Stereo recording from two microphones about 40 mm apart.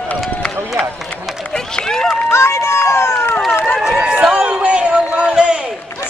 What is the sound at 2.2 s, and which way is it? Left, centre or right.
Run, left.